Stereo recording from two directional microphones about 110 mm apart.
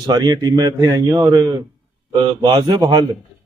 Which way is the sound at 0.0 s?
40° right (ahead or behind).